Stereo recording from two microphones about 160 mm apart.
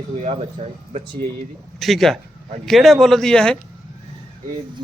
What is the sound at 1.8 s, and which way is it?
Speech, centre (ahead or behind).